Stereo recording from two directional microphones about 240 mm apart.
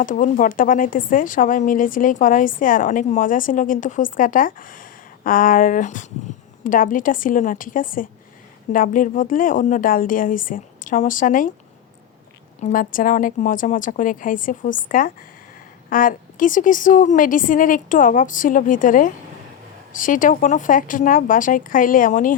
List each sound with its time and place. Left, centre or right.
0.0 s a woman's voice: left
12.6 s a woman's voice: left